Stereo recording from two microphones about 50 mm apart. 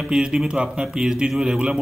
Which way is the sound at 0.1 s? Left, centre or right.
Centre.